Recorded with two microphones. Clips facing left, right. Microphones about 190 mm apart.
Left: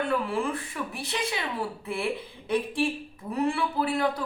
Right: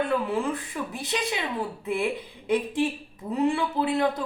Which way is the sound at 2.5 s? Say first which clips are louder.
Right 2 dB; 20° right (ahead or behind).